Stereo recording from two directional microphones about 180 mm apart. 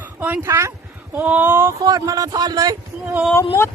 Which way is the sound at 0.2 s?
10° right (ahead or behind).